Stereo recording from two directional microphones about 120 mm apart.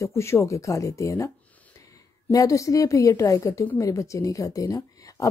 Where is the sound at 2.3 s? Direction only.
30° left (ahead or behind).